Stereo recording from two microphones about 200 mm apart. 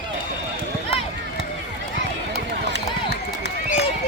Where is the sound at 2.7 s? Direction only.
55° left (ahead or behind).